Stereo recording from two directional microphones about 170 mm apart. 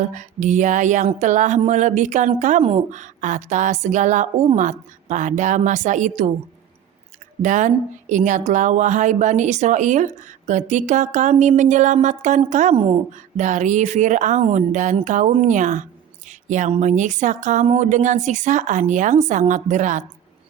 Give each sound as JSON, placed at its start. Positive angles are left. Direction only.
{"t": 0.0, "sound": "a woman's voice", "side_deg": -45}
{"t": 7.4, "sound": "a woman's voice", "side_deg": -45}